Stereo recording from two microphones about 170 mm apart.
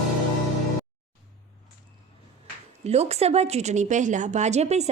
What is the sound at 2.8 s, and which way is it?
A woman's voice, 40° right (ahead or behind).